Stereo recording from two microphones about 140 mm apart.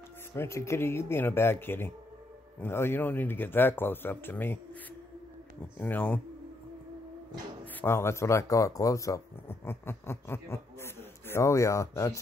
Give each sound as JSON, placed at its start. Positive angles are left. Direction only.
{"t": 0.3, "sound": "speech", "side_deg": 20}
{"t": 5.8, "sound": "speech", "side_deg": 10}
{"t": 7.8, "sound": "speech", "side_deg": 15}